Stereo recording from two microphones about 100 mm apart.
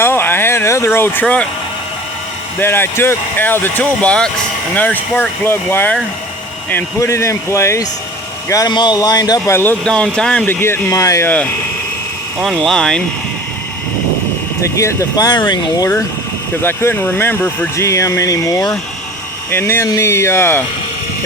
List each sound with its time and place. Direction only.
0.0 s a sound: 20° left (ahead or behind)
1.2 s speech: 10° left (ahead or behind)
2.6 s speech: 20° left (ahead or behind)
8.7 s speech: 45° left (ahead or behind)
9.5 s speech: 25° left (ahead or behind)
9.8 s speech: 10° left (ahead or behind)
10.4 s speech: 20° left (ahead or behind)
12.4 s speech: centre (ahead or behind)
14.8 s speech: 30° left (ahead or behind); by 15.9 s 45° left (ahead or behind)
16.6 s speech: 20° left (ahead or behind)
17.7 s speech: 30° left (ahead or behind)